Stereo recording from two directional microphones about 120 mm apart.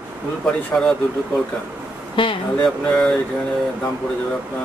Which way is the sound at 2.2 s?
45° left (ahead or behind).